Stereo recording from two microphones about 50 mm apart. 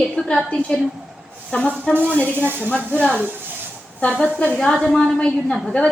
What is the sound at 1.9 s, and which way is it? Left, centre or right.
Speech, right.